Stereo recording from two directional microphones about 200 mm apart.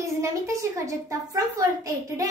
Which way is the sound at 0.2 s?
15° right (ahead or behind).